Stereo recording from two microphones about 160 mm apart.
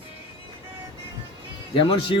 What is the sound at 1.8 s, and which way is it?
Speech, 30° left (ahead or behind).